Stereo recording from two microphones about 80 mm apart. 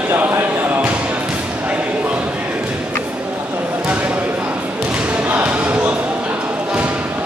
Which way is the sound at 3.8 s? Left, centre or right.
Centre.